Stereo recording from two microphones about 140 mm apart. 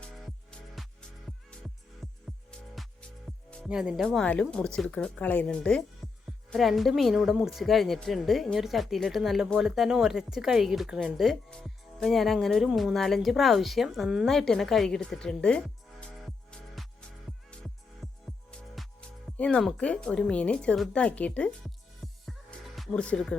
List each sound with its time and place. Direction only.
0.0 s music: 5° left (ahead or behind)
2.0 s music: centre (ahead or behind)
3.7 s speech: 5° right (ahead or behind)
6.0 s music: centre (ahead or behind)
6.5 s a woman's voice: centre (ahead or behind)
17.5 s music: 5° left (ahead or behind)
18.5 s speech: 5° left (ahead or behind)
22.0 s music: centre (ahead or behind)